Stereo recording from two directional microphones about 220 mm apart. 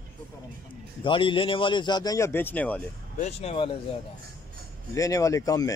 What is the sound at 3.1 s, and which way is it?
Speech, 30° left (ahead or behind).